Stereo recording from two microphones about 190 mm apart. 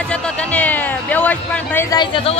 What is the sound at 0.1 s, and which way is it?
Speech, 5° left (ahead or behind).